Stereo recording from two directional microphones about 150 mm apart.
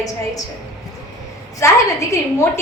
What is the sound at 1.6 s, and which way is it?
Speech, 20° left (ahead or behind).